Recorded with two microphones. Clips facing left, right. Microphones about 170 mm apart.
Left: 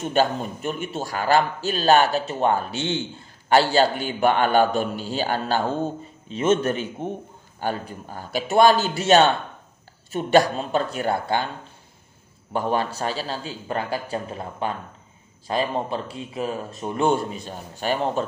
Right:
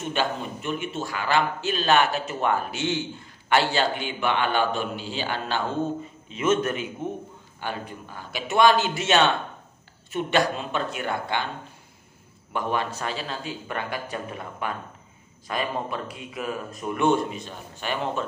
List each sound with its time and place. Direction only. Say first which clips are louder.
0.1 s a man's voice: left 6 dB; 40° left (ahead or behind)
12.5 s a man's voice: left 4 dB; 35° left (ahead or behind)